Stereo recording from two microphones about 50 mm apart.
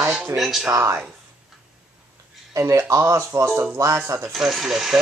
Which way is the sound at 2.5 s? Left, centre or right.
Right.